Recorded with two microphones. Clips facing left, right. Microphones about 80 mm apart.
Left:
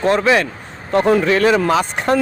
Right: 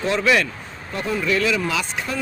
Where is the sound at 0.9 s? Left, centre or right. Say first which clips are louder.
Left 12 dB; left.